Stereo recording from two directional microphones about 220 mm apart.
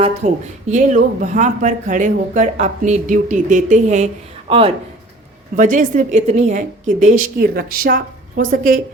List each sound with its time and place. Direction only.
0.2 s speech: 35° right (ahead or behind)
5.5 s speech: 35° right (ahead or behind)